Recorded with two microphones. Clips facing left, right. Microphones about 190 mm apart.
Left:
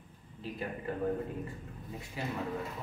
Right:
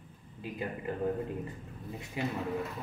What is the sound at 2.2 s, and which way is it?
Speech, 20° right (ahead or behind).